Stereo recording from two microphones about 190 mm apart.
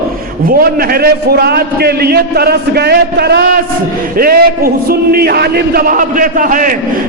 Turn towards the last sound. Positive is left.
turn(degrees=-45)  # may be behind; listen again after turning